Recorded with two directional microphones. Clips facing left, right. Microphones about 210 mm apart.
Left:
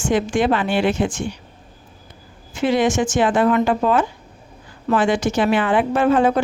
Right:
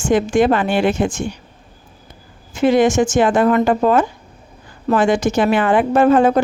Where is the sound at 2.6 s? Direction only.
45° right (ahead or behind).